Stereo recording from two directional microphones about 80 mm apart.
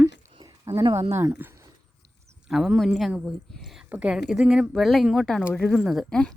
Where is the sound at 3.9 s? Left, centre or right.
Centre.